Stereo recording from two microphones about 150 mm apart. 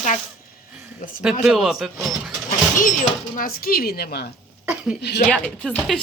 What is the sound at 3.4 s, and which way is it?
A woman's voice, 75° left (ahead or behind).